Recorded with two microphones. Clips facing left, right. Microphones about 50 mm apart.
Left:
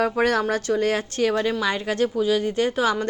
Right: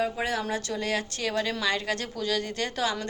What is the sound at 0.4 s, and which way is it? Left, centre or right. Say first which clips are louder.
A woman's voice: left 8 dB; left.